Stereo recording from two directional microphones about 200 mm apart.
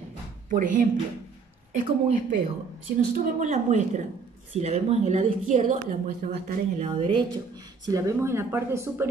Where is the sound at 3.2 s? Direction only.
35° right (ahead or behind).